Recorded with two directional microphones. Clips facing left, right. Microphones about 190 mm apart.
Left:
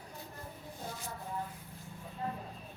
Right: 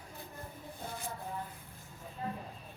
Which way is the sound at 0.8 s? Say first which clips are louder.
Right 2 dB; 55° right (ahead or behind).